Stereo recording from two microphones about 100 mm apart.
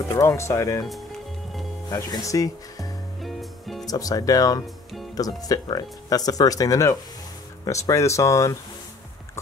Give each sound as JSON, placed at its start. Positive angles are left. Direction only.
{"t": 0.1, "sound": "speech", "side_deg": 30}
{"t": 1.9, "sound": "speech", "side_deg": 40}
{"t": 3.2, "sound": "music", "side_deg": 0}
{"t": 3.8, "sound": "speech", "side_deg": 40}